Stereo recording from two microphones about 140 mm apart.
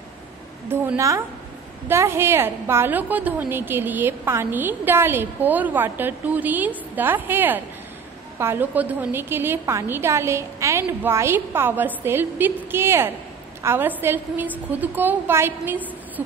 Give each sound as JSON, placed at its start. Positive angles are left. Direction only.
{"t": 0.7, "sound": "a woman's voice", "side_deg": -20}